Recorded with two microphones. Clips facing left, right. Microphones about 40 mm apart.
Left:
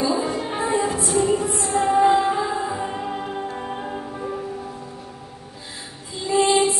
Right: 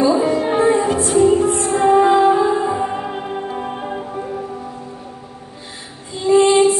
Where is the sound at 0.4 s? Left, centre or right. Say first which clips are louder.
Right 9 dB; right.